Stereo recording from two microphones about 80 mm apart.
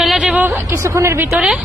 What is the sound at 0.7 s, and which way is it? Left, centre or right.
Speech, right.